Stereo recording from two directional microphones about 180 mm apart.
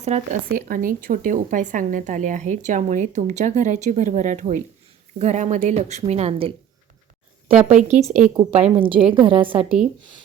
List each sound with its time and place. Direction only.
0.0 s a woman's voice: 45° right (ahead or behind)
7.7 s a woman's voice: 40° right (ahead or behind)
9.6 s speech: 5° right (ahead or behind)